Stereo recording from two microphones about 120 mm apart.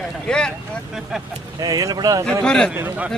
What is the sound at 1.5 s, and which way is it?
Speech, 30° right (ahead or behind).